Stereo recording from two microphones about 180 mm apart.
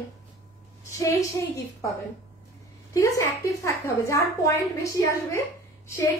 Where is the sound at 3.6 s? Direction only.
15° left (ahead or behind).